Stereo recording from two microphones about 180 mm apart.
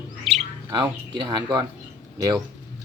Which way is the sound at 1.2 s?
25° right (ahead or behind).